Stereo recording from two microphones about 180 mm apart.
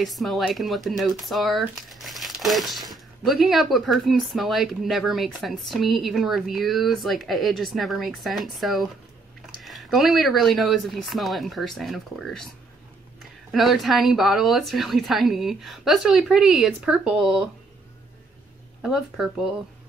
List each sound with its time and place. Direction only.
0.0 s speech: centre (ahead or behind)
13.5 s speech: centre (ahead or behind)
18.8 s speech: centre (ahead or behind)